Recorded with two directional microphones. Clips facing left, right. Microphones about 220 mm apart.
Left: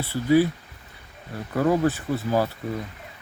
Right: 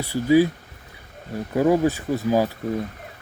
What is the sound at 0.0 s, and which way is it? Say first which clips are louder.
Speech: right 2 dB; 15° right (ahead or behind).